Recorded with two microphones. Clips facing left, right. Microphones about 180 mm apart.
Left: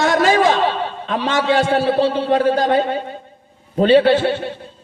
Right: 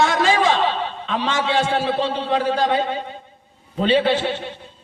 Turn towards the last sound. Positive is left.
turn(degrees=45)  # may be behind; listen again after turning